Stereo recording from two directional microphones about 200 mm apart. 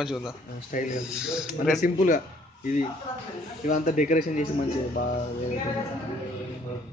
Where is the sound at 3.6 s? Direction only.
40° left (ahead or behind).